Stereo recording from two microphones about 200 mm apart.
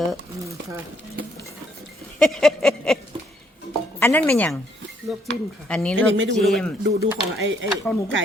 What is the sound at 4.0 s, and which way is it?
Speech, 10° left (ahead or behind).